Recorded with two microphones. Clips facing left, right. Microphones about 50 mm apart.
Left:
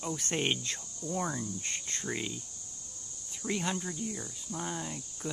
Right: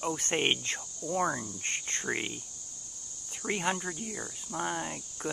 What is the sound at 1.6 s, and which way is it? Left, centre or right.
Speech, right.